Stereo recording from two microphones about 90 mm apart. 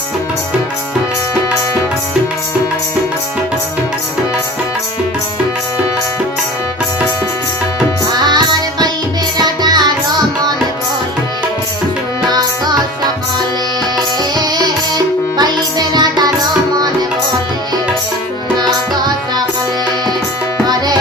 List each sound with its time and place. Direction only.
9.4 s music: 50° right (ahead or behind)
14.3 s music: 50° right (ahead or behind)
18.5 s music: 50° right (ahead or behind)
20.7 s tabla: 50° right (ahead or behind)